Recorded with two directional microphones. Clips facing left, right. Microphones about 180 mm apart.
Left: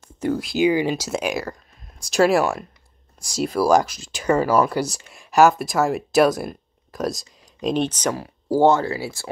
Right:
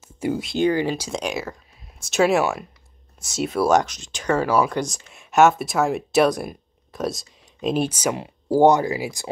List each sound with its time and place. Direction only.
0.0 s speech: 5° right (ahead or behind)